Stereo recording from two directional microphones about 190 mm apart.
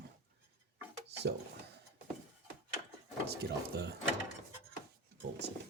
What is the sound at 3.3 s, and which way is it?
Speech, 55° right (ahead or behind).